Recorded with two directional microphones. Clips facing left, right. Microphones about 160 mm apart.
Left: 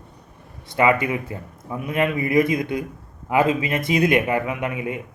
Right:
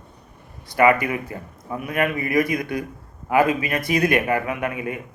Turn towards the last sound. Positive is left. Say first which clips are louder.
# even
turn(degrees=20)  # may be behind; listen again after turning